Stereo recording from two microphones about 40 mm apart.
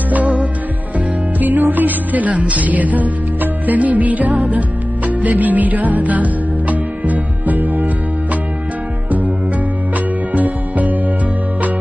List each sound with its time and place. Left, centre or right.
0.1 s music: right
0.9 s music: right
10.3 s music: right